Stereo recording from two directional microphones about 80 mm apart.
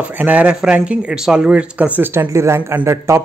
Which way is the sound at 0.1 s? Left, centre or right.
Right.